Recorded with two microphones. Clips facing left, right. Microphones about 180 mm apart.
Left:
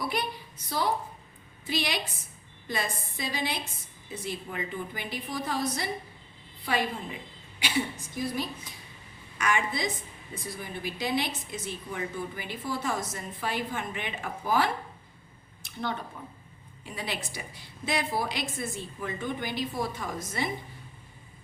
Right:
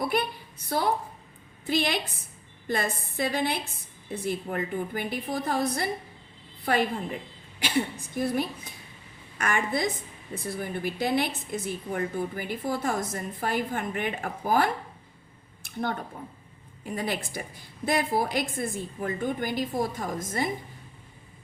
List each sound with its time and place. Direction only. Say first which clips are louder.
0.0 s a woman's voice: right 4 dB; 50° right (ahead or behind)
1.6 s a woman's voice: right 4 dB; 55° right (ahead or behind)
15.8 s a woman's voice: right 3 dB; 50° right (ahead or behind)